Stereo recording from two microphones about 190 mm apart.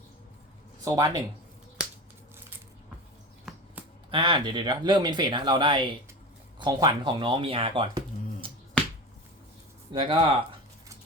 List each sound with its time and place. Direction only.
0.9 s speech: 20° right (ahead or behind)
4.1 s speech: 25° right (ahead or behind)
8.8 s finger snapping: 5° left (ahead or behind)
9.9 s speech: 30° right (ahead or behind)